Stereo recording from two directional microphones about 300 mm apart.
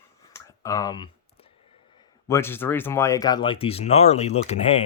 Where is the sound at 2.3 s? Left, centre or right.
Centre.